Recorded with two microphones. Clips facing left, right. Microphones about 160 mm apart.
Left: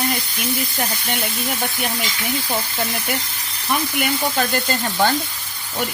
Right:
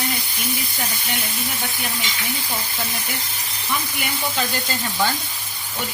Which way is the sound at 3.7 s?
55° left (ahead or behind).